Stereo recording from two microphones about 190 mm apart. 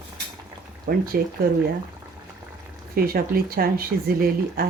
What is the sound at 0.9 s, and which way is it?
Speech, 50° right (ahead or behind).